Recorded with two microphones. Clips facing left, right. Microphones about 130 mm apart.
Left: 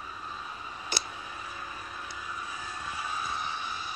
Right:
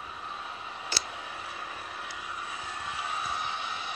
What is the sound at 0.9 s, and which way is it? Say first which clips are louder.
Tick: left 2 dB; 20° left (ahead or behind).